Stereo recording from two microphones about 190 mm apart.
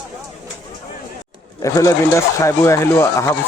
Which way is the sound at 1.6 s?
15° left (ahead or behind).